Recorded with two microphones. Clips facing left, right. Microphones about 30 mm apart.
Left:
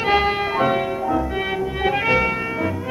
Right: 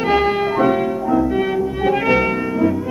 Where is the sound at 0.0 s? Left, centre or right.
Centre.